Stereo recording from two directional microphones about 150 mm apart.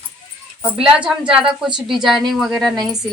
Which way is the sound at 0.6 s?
5° right (ahead or behind).